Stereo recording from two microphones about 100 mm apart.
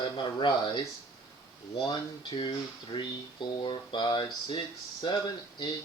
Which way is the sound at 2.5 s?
50° left (ahead or behind).